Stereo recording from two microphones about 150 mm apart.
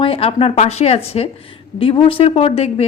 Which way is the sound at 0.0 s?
40° left (ahead or behind).